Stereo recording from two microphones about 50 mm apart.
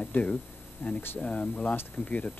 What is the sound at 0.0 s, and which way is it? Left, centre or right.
Speech, left.